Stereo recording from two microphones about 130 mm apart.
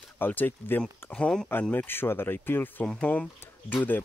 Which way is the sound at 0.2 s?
15° left (ahead or behind).